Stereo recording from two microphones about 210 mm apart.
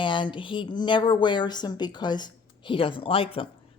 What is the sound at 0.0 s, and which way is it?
A woman's voice, 20° left (ahead or behind).